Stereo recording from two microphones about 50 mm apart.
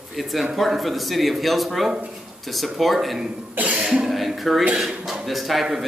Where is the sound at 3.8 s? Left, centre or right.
Centre.